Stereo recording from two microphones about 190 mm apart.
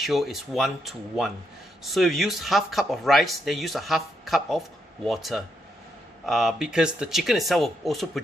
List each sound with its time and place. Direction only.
0.0 s speech: centre (ahead or behind)